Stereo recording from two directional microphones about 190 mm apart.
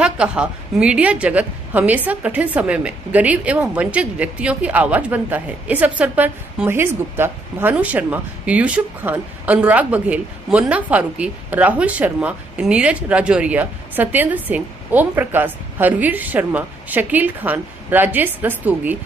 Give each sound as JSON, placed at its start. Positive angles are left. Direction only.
{"t": 0.0, "sound": "a woman's voice", "side_deg": -5}